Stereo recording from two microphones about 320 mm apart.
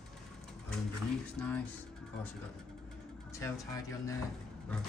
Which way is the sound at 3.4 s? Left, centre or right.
Centre.